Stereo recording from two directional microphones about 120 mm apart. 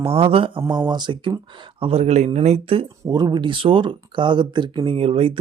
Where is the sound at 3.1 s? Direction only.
35° right (ahead or behind).